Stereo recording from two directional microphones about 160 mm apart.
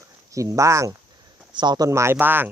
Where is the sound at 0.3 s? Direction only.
20° right (ahead or behind).